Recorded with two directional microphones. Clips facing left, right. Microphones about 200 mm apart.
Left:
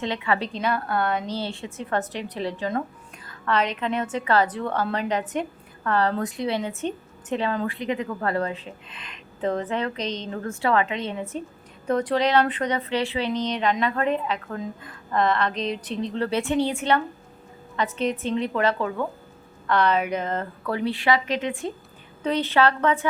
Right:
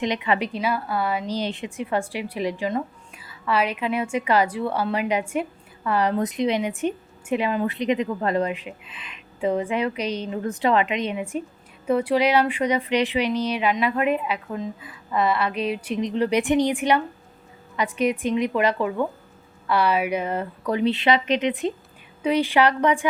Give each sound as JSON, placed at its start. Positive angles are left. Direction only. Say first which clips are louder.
{"t": 0.0, "sound": "a woman's voice", "louder": "right 2 dB", "side_deg": -15}
{"t": 8.9, "sound": "a woman's voice", "louder": "even", "side_deg": -5}